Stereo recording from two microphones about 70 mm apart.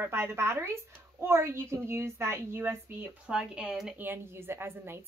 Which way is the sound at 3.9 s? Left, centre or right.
Right.